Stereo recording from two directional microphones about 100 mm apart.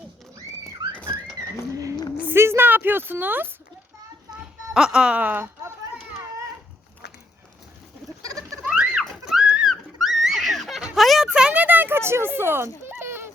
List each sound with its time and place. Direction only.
0.3 s a sound: 35° right (ahead or behind)
2.2 s speech: 25° right (ahead or behind)
4.7 s speech: 5° right (ahead or behind)
8.2 s goat: 35° right (ahead or behind)
8.6 s a sound: 10° right (ahead or behind)
11.3 s speech: 10° right (ahead or behind)